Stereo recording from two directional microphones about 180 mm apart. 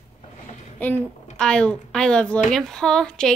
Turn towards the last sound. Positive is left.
turn(degrees=5)  # may be behind; listen again after turning